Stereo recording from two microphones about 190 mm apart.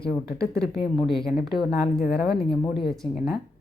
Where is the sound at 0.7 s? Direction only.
Centre (ahead or behind).